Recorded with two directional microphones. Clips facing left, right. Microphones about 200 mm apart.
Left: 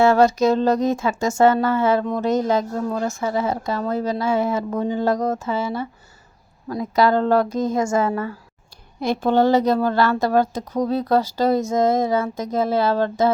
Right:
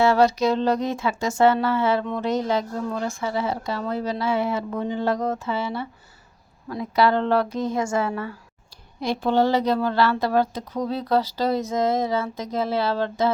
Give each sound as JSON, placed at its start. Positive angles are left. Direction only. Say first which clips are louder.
{"t": 0.0, "sound": "speech", "louder": "left 3 dB", "side_deg": 45}